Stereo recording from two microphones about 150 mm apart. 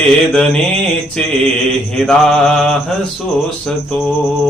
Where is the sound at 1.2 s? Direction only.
5° left (ahead or behind).